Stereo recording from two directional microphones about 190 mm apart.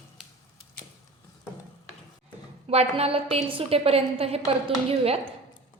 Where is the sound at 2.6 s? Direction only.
30° right (ahead or behind).